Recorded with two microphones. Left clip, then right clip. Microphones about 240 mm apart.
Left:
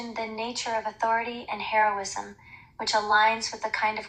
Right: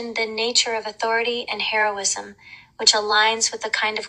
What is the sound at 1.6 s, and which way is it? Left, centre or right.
Speech, right.